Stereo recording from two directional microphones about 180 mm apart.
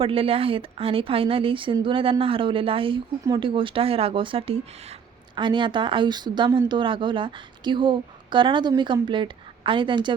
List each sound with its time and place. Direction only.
0.0 s a woman's voice: 30° right (ahead or behind)